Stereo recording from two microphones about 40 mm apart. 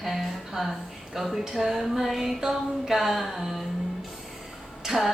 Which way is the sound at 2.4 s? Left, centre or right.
Centre.